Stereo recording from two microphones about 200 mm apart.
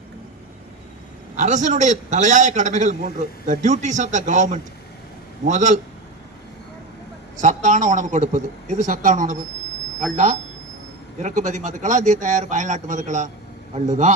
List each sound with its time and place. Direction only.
1.4 s a man's voice: 35° right (ahead or behind)
7.4 s a man's voice: 35° right (ahead or behind)
10.0 s speech: centre (ahead or behind)
11.2 s a man's voice: 35° right (ahead or behind)